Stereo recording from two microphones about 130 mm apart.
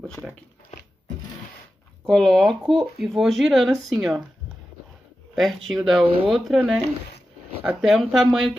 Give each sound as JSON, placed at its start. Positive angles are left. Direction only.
{"t": 0.0, "sound": "speech", "side_deg": 5}
{"t": 2.0, "sound": "speech", "side_deg": 5}
{"t": 5.3, "sound": "speech", "side_deg": 0}
{"t": 7.8, "sound": "speech", "side_deg": 0}